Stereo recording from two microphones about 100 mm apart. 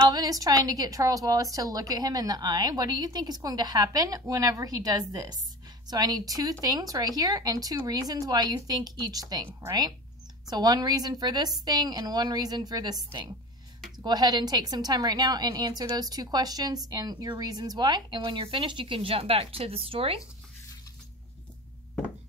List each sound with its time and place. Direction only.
0.1 s a woman's voice: 40° right (ahead or behind); by 20.2 s 70° right (ahead or behind)